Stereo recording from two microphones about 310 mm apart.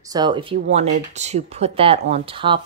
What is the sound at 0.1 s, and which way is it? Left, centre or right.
Speech, centre.